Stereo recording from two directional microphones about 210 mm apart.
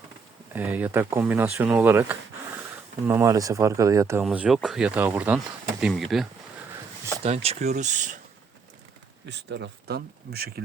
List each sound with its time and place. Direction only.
0.5 s speech: 10° right (ahead or behind)
7.4 s speech: 30° right (ahead or behind)
9.3 s speech: 55° right (ahead or behind)